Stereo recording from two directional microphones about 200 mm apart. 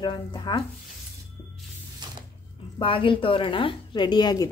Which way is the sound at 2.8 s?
25° left (ahead or behind).